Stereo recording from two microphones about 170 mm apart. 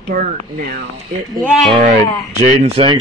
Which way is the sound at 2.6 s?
35° right (ahead or behind).